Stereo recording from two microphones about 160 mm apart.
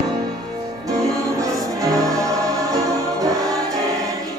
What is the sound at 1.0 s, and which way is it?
Music, 20° right (ahead or behind).